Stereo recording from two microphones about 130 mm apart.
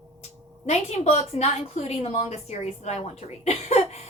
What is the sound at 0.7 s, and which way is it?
A woman's voice, 55° left (ahead or behind).